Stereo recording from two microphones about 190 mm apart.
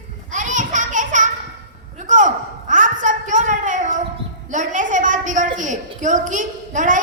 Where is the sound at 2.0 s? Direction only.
40° right (ahead or behind).